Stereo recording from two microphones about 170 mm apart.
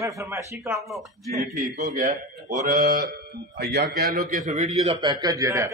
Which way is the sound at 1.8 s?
50° right (ahead or behind).